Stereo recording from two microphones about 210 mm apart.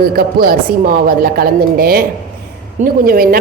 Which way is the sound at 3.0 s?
45° right (ahead or behind).